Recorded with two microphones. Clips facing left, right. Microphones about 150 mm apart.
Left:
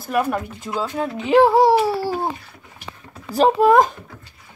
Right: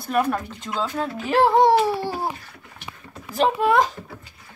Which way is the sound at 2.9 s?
35° left (ahead or behind).